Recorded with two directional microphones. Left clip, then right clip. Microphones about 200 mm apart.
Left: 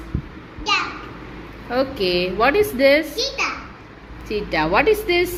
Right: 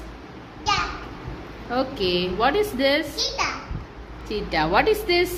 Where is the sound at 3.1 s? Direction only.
30° right (ahead or behind).